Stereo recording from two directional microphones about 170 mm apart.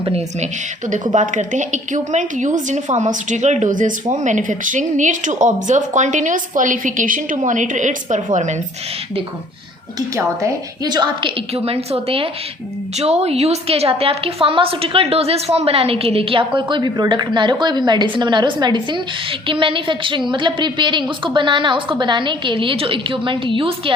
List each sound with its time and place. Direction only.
0.0 s a woman's voice: 35° right (ahead or behind)
1.1 s speech: 45° right (ahead or behind)
10.2 s a woman's voice: 20° right (ahead or behind)